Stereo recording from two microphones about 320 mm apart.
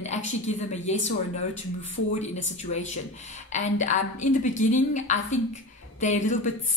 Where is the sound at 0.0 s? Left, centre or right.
Left.